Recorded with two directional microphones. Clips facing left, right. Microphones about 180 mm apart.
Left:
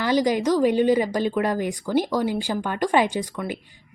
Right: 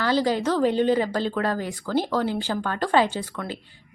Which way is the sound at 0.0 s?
15° left (ahead or behind).